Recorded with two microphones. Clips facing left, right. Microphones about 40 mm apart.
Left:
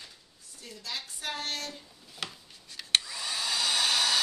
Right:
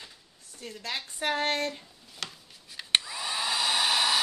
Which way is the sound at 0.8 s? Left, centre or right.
Right.